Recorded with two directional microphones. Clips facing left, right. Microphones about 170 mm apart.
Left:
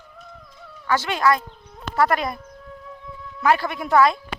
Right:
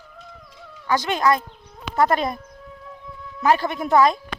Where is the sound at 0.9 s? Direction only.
20° right (ahead or behind).